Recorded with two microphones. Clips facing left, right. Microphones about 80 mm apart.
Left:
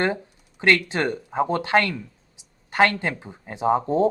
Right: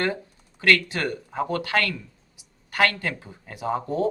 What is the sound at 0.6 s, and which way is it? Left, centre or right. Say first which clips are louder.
A man's voice: left 2 dB; left.